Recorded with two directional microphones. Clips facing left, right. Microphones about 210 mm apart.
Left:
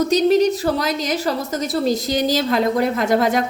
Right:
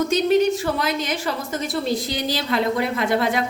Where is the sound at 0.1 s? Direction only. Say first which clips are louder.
Left 2 dB; 40° left (ahead or behind).